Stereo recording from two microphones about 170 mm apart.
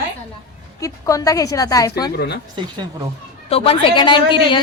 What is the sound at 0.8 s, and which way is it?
A woman's voice, 20° left (ahead or behind).